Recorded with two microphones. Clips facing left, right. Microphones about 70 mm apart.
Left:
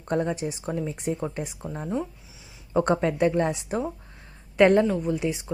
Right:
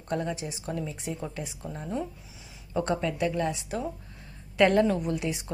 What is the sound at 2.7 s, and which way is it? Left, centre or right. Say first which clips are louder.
Speech: left 6 dB; left.